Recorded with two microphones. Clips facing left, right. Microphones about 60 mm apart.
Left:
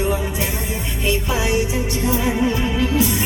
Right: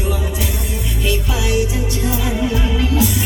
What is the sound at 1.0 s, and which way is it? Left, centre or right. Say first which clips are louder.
Music: left 1 dB; left.